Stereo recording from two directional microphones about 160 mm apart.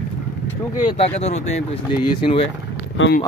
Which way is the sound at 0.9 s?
40° left (ahead or behind).